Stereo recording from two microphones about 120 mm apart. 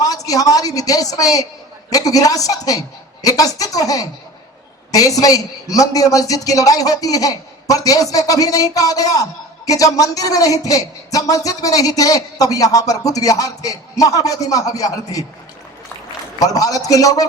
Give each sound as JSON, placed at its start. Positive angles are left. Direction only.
{"t": 0.0, "sound": "a woman's voice", "side_deg": 30}
{"t": 16.4, "sound": "a man's voice", "side_deg": 30}